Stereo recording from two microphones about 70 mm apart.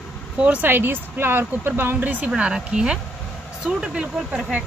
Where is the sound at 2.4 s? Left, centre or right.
Centre.